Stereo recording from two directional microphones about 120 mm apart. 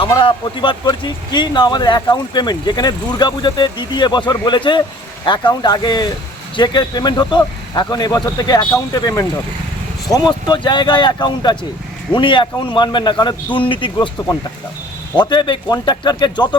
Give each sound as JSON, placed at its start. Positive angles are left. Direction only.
{"t": 0.2, "sound": "a man's voice", "side_deg": 45}
{"t": 15.1, "sound": "speech", "side_deg": 40}